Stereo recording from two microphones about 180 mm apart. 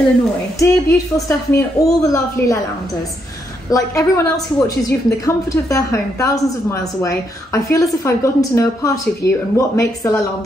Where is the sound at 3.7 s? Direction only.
15° left (ahead or behind).